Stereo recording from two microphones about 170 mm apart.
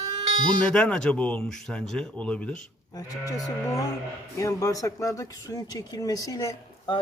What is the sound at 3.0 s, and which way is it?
Speech, 20° left (ahead or behind).